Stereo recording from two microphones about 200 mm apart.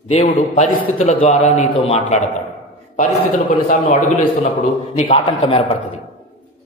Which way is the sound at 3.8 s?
30° left (ahead or behind).